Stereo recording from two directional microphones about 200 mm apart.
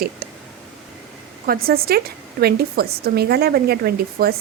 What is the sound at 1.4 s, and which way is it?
A woman's voice, 50° right (ahead or behind).